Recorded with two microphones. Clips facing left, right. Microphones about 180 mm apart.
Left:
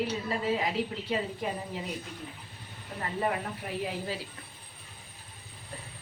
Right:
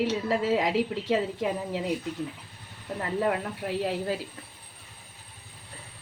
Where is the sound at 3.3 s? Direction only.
75° right (ahead or behind).